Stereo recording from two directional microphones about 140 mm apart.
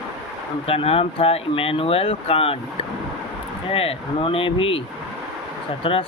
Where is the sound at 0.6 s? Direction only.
45° left (ahead or behind).